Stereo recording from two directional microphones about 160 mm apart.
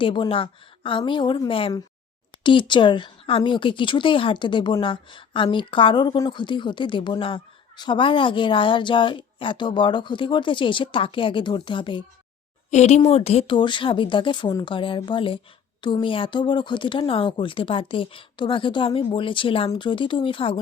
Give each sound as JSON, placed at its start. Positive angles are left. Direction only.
{"t": 0.0, "sound": "speech", "side_deg": 30}
{"t": 12.7, "sound": "speech", "side_deg": 45}